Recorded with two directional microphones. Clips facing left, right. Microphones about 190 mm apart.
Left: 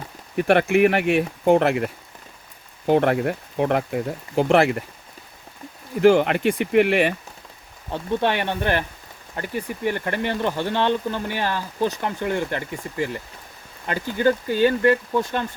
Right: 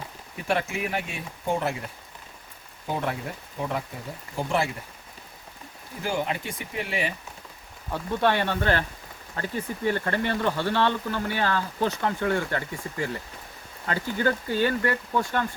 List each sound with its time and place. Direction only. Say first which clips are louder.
0.3 s speech: left 11 dB; 70° left (ahead or behind)
6.0 s speech: left 13 dB; 70° left (ahead or behind)
7.9 s speech: left 2 dB; 20° left (ahead or behind)